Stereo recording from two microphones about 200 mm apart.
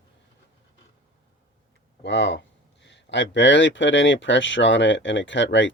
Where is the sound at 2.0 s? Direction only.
60° left (ahead or behind).